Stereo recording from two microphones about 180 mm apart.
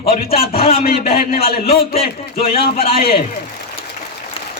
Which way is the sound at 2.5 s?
30° left (ahead or behind).